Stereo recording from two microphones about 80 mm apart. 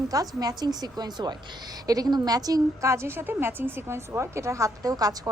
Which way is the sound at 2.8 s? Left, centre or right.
Right.